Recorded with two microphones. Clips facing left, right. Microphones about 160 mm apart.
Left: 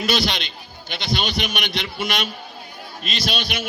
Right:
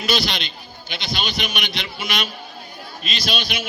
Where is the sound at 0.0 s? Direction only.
60° left (ahead or behind).